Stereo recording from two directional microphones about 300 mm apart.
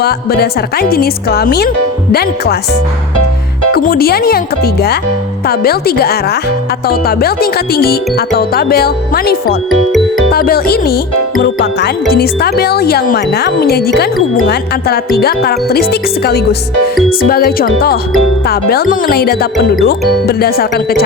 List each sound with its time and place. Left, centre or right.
0.0 s speech: left
3.8 s speech: left
9.6 s speech: centre
10.3 s speech: left